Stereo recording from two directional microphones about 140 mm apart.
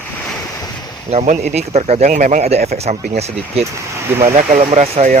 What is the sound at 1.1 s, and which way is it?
Speech, 55° right (ahead or behind).